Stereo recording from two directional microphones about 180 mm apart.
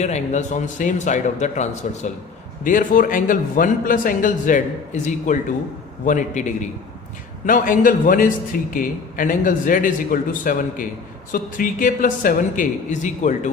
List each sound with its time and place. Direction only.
0.0 s a man's voice: 40° left (ahead or behind)